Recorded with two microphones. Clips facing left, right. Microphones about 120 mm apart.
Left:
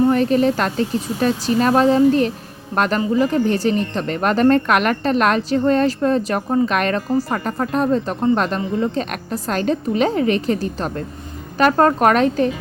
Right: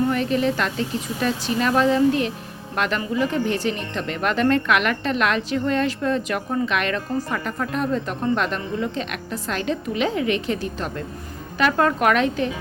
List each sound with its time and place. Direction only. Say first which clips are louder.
0.1 s speech: left 5 dB; 40° left (ahead or behind)